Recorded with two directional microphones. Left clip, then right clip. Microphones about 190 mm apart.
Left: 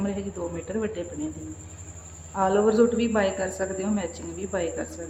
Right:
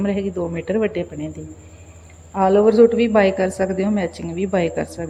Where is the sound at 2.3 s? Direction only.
30° right (ahead or behind).